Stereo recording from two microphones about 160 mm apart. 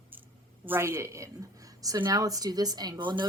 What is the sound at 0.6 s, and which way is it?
A woman's voice, 15° right (ahead or behind).